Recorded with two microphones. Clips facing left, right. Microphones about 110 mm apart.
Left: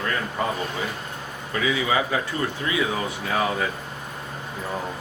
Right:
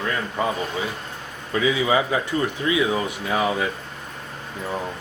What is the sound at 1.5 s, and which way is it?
A man's voice, 20° right (ahead or behind).